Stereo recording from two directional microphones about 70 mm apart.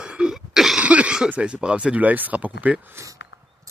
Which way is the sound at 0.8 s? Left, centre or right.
Centre.